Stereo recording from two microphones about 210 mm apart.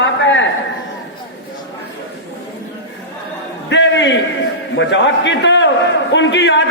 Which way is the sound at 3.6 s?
60° left (ahead or behind).